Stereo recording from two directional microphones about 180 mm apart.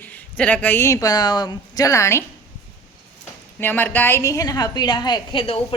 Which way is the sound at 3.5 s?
10° left (ahead or behind).